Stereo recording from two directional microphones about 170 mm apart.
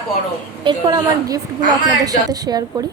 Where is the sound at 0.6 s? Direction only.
30° right (ahead or behind).